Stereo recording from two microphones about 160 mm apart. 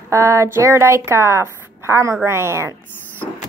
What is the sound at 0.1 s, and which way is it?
A woman's voice, 20° right (ahead or behind).